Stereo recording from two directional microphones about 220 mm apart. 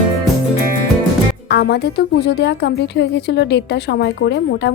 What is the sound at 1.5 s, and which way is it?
Speech, 50° left (ahead or behind).